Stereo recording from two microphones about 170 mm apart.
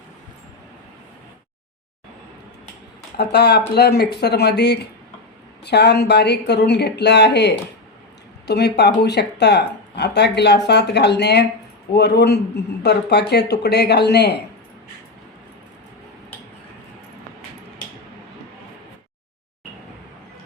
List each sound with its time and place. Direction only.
3.2 s speech: 75° left (ahead or behind)
8.4 s speech: 75° left (ahead or behind)